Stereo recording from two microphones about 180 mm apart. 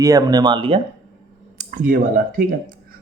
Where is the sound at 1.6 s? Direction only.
45° right (ahead or behind).